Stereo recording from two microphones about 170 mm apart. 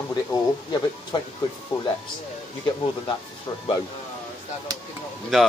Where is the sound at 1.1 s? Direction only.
30° left (ahead or behind).